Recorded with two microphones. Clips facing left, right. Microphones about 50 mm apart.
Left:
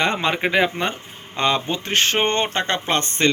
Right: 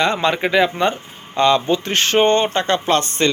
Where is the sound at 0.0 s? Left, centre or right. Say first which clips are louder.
Right 3 dB; centre.